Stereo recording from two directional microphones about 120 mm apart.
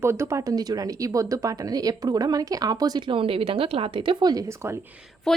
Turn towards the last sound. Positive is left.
turn(degrees=5)  # may be behind; listen again after turning